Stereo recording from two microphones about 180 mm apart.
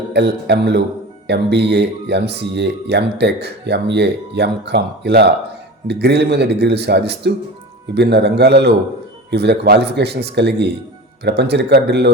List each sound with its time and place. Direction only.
0.1 s speech: 70° right (ahead or behind)